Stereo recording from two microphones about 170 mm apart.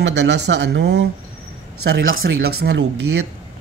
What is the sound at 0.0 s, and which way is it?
Speech, 90° right.